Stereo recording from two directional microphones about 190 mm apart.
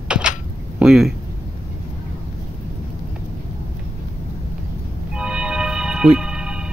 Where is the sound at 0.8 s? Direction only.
Centre (ahead or behind).